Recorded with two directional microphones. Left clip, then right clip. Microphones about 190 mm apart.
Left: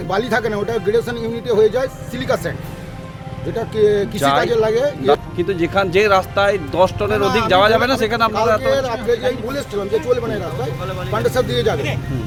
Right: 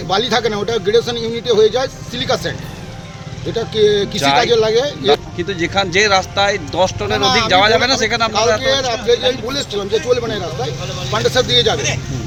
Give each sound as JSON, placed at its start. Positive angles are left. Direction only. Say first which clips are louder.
{"t": 0.1, "sound": "speech", "louder": "right 3 dB", "side_deg": 10}
{"t": 3.5, "sound": "speech", "louder": "right 2 dB", "side_deg": 10}
{"t": 8.3, "sound": "speech", "louder": "right 1 dB", "side_deg": 5}